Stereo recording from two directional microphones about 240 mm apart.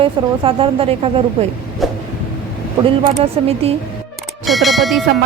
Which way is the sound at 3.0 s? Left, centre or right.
Right.